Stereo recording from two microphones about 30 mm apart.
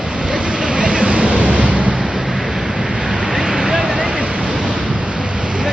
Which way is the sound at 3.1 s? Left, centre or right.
Right.